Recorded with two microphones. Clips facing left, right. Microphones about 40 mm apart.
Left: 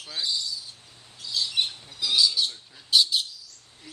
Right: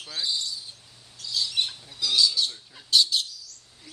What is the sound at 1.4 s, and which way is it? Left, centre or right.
Bird, centre.